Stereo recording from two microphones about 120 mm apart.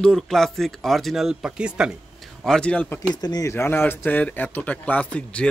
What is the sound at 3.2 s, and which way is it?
Speech, 30° left (ahead or behind).